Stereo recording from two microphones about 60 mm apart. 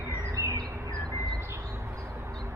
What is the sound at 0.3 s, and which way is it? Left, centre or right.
Bird, right.